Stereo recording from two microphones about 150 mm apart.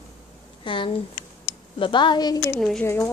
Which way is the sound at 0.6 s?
35° left (ahead or behind).